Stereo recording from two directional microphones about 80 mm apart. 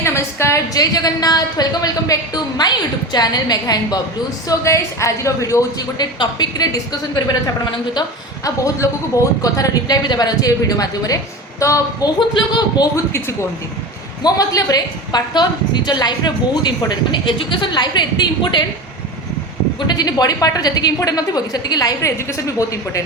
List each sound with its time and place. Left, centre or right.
0.0 s a woman's voice: left
0.7 s a woman's voice: left
4.4 s a woman's voice: left
6.0 s a woman's voice: left
10.0 s a woman's voice: left
12.3 s a man's voice: left
14.2 s a woman's voice: left
19.9 s a woman's voice: left